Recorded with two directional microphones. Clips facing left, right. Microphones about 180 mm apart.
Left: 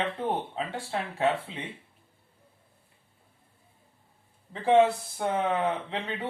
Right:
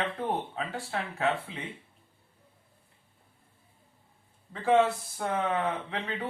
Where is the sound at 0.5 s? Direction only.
30° left (ahead or behind).